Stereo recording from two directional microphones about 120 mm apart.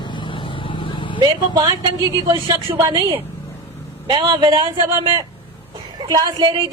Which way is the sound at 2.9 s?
45° right (ahead or behind).